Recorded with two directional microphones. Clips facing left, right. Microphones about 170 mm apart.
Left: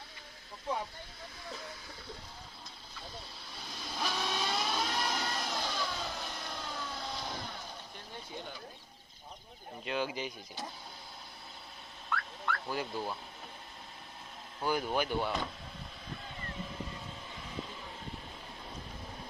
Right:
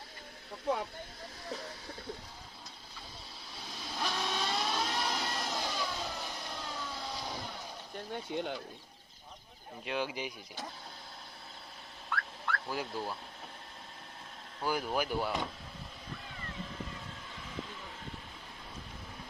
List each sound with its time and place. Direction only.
3.6 s vehicle: centre (ahead or behind)
8.3 s speech: 75° right (ahead or behind)
9.8 s speech: centre (ahead or behind)
12.0 s dog: centre (ahead or behind)
14.6 s speech: 5° right (ahead or behind)